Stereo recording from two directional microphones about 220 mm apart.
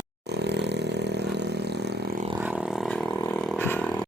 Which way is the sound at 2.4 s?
5° right (ahead or behind).